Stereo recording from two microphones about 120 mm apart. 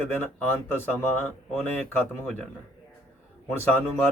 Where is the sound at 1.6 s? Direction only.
15° left (ahead or behind).